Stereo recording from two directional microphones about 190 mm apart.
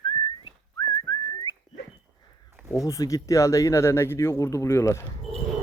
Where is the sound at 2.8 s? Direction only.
15° left (ahead or behind).